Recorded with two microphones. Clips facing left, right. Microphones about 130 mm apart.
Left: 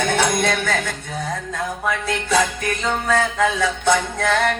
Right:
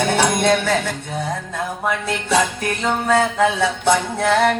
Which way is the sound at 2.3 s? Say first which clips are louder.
Right 1 dB; 25° right (ahead or behind).